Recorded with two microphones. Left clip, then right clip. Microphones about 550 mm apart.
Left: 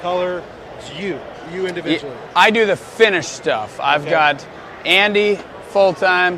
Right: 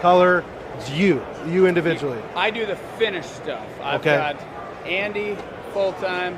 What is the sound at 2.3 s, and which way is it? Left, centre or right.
A man's voice, left.